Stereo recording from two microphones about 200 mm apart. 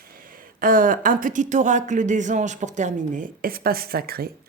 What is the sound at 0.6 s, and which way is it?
Speech, 45° right (ahead or behind).